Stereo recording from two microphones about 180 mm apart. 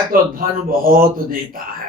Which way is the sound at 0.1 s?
50° right (ahead or behind).